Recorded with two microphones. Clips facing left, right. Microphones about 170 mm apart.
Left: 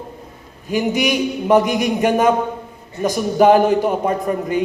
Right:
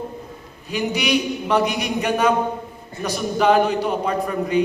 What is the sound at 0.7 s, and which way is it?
Speech, 45° left (ahead or behind).